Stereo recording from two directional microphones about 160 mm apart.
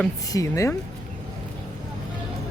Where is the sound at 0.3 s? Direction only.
20° left (ahead or behind).